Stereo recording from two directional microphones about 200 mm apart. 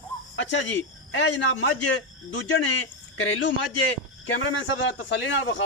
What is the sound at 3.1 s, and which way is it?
Speech, 70° left (ahead or behind).